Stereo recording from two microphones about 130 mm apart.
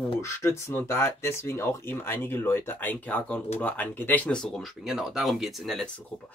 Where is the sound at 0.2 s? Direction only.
20° left (ahead or behind).